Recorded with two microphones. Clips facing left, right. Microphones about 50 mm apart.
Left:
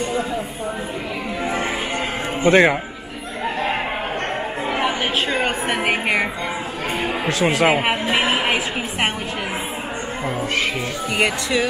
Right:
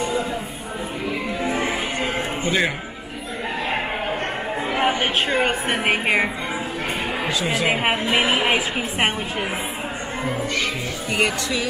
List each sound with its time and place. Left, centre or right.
2.4 s a man's voice: left
4.7 s a sound: right
5.4 s a woman's voice: centre
7.2 s a man's voice: left
8.2 s a woman's voice: left